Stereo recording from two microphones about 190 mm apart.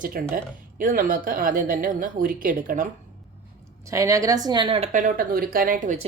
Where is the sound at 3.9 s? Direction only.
15° right (ahead or behind).